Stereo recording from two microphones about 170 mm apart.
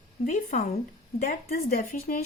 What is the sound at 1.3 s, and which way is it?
Speech, 60° left (ahead or behind).